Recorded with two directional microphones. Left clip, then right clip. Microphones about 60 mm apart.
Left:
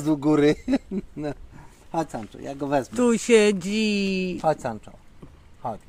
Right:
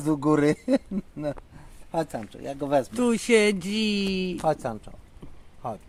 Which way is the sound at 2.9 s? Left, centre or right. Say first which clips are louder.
Left 7 dB; centre.